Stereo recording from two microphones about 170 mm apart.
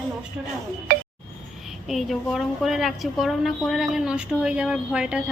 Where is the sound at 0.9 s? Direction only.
55° right (ahead or behind).